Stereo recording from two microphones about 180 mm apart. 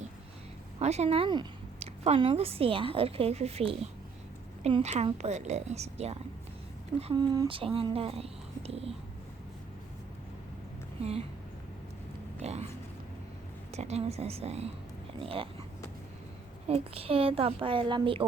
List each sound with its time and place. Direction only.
0.8 s a woman's voice: 35° right (ahead or behind)
7.1 s a woman's voice: 25° right (ahead or behind)
11.0 s a woman's voice: 35° right (ahead or behind)
12.4 s a sound: 35° right (ahead or behind)
13.7 s a woman's voice: 35° right (ahead or behind)
16.6 s a woman's voice: 35° right (ahead or behind)